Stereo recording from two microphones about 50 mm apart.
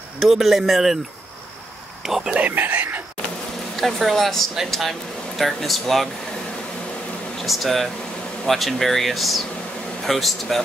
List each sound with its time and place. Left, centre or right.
0.2 s speech: centre
2.0 s speech: centre
2.3 s whispering: right
3.7 s speech: centre
7.4 s speech: centre